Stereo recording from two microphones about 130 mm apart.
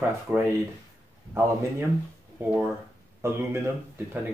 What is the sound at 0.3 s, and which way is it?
Speech, 10° right (ahead or behind).